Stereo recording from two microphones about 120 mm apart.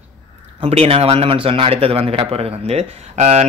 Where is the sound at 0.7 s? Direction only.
60° right (ahead or behind).